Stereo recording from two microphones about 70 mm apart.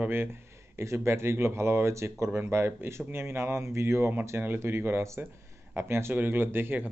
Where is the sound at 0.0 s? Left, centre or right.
Right.